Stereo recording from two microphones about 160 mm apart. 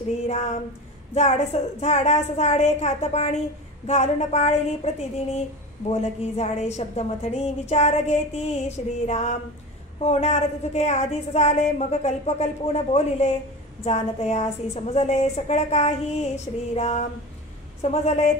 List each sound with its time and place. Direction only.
1.1 s a woman's voice: 40° left (ahead or behind)
16.7 s a sound: 40° left (ahead or behind)
17.8 s a woman's voice: 45° left (ahead or behind)